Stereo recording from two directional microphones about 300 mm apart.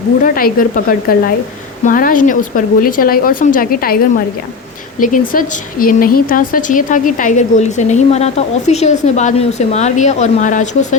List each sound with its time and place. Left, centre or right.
0.3 s speech: left
4.9 s speech: left